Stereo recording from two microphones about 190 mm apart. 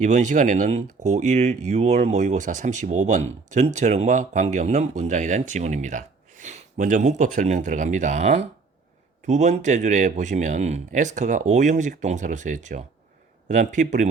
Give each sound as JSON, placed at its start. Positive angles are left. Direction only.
{"t": 0.0, "sound": "speech", "side_deg": -40}